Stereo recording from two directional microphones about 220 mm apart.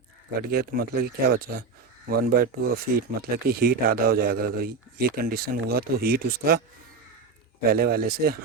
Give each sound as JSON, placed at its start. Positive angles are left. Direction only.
{"t": 0.5, "sound": "speech", "side_deg": -45}
{"t": 7.7, "sound": "speech", "side_deg": -45}